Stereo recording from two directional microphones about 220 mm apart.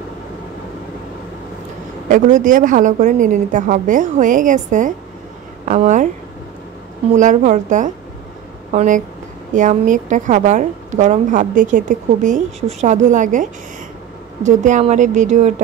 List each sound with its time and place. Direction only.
2.0 s a woman's voice: 40° right (ahead or behind)
7.2 s a woman's voice: 35° right (ahead or behind)